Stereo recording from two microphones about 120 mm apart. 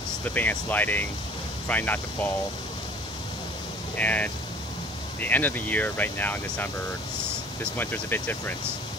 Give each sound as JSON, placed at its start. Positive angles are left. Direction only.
{"t": 0.2, "sound": "speech", "side_deg": 15}
{"t": 3.9, "sound": "speech", "side_deg": 10}